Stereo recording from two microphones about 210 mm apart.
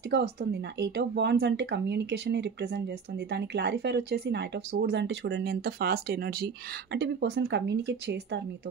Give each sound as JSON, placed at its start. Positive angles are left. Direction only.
{"t": 0.1, "sound": "speech", "side_deg": -50}